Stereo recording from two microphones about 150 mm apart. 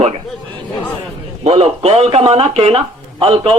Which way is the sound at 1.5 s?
40° right (ahead or behind).